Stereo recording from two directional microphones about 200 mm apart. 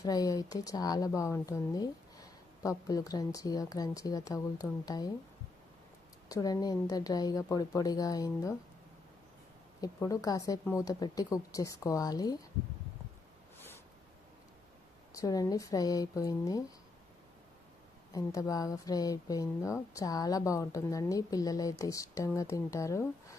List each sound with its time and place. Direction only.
0.0 s speech: 20° left (ahead or behind)
6.2 s a woman's voice: 20° left (ahead or behind)
9.8 s speech: 15° left (ahead or behind)
13.6 s a sound: 10° left (ahead or behind)
15.1 s speech: 20° left (ahead or behind)
18.1 s speech: 15° left (ahead or behind)